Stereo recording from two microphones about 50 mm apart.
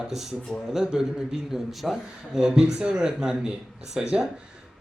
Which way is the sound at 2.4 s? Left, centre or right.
Centre.